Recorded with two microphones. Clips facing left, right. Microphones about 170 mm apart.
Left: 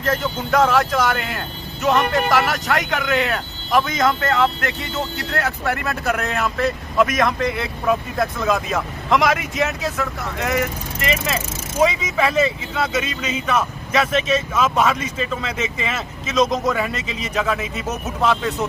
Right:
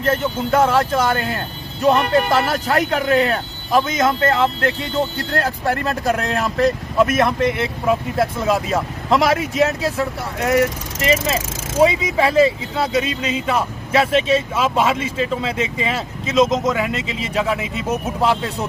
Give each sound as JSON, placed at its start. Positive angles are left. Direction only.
{"t": 0.5, "sound": "speech", "side_deg": -30}
{"t": 11.8, "sound": "speech", "side_deg": -30}